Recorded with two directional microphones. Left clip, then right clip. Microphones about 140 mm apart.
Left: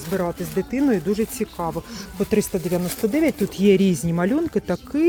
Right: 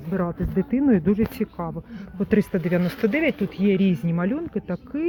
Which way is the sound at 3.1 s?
30° left (ahead or behind).